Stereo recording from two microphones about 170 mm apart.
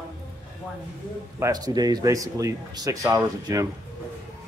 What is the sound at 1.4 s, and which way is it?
Speech, 20° right (ahead or behind).